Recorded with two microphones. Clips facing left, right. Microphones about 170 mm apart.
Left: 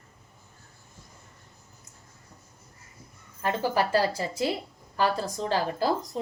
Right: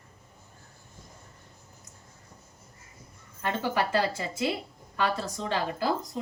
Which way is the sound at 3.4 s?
35° left (ahead or behind).